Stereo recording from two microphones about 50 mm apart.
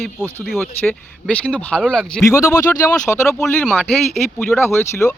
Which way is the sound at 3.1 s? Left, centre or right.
Left.